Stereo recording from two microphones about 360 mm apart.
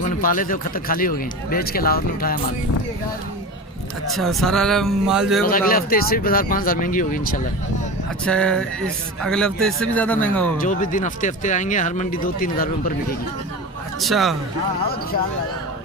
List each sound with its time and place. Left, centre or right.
0.0 s speech: left
4.2 s speech: centre
5.5 s speech: left
8.3 s speech: centre
10.6 s speech: left
14.0 s speech: centre